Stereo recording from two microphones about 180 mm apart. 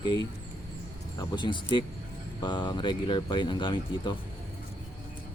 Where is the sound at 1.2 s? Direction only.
25° left (ahead or behind).